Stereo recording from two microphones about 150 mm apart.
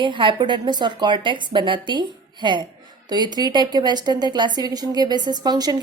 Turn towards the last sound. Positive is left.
turn(degrees=-25)  # may be behind; listen again after turning